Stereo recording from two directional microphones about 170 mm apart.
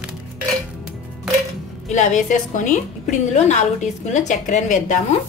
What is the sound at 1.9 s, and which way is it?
A woman's voice, 45° left (ahead or behind).